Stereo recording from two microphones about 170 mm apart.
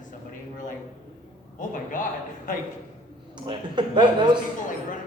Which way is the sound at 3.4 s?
25° right (ahead or behind).